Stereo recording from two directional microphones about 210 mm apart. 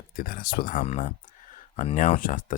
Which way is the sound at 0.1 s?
45° left (ahead or behind).